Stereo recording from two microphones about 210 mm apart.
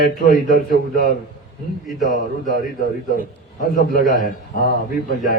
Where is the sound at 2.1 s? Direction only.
40° left (ahead or behind).